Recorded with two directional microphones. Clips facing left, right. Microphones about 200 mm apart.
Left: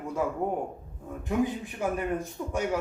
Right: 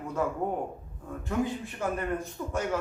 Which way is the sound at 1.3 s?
15° left (ahead or behind).